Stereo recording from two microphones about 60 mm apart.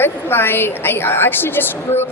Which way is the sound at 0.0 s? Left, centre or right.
Left.